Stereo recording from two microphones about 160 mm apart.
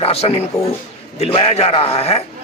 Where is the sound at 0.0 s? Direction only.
40° left (ahead or behind).